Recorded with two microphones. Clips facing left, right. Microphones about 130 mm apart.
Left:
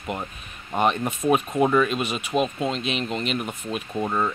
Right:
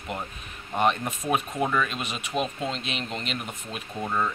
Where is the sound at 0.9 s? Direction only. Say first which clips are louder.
Left 6 dB; 35° left (ahead or behind).